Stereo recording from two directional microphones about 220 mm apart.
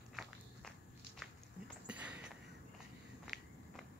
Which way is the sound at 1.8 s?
5° right (ahead or behind).